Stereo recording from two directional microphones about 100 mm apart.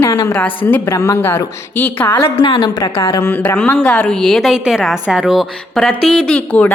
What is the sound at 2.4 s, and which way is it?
Speech, 50° left (ahead or behind).